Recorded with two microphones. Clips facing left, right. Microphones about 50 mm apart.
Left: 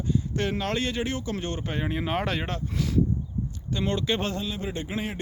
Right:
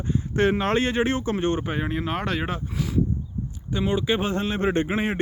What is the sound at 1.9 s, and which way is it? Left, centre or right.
Speech, centre.